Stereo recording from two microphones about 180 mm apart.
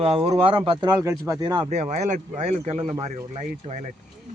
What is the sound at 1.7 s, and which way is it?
Speech, 40° right (ahead or behind).